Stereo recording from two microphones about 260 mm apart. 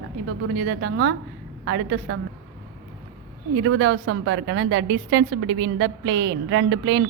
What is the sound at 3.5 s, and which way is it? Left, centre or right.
A woman's voice, right.